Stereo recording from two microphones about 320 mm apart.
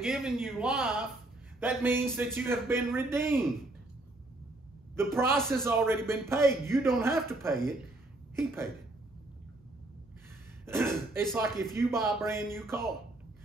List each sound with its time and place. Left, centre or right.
0.0 s a man's voice: centre
4.9 s a man's voice: centre
10.6 s a man's voice: centre